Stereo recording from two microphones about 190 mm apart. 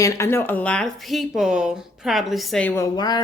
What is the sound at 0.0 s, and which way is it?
A woman's voice, 15° left (ahead or behind).